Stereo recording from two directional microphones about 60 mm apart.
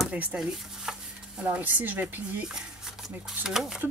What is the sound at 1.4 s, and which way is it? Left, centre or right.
Speech, right.